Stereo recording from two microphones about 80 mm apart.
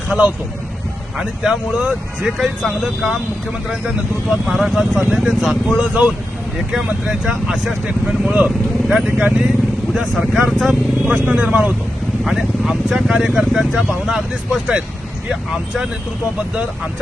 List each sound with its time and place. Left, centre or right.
0.1 s speech: centre
4.3 s speech: centre
7.9 s speech: centre
11.1 s speech: centre